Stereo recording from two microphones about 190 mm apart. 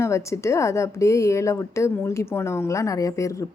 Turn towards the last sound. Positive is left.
turn(degrees=15)  # may be behind; listen again after turning